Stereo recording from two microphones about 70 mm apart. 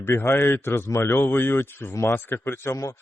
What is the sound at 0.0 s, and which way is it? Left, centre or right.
Speech, left.